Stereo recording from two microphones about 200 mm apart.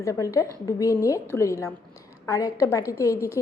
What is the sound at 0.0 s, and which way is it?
A woman's voice, 15° left (ahead or behind).